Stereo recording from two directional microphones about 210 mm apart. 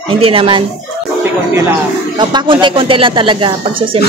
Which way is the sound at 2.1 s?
20° right (ahead or behind).